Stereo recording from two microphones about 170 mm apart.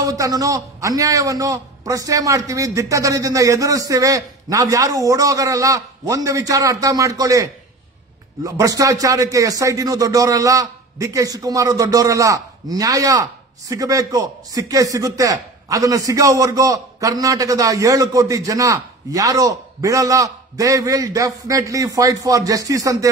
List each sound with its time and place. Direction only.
0.0 s speech: 20° right (ahead or behind)
8.5 s speech: 20° right (ahead or behind)